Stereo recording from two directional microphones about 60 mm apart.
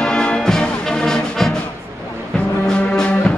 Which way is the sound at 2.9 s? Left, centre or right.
Centre.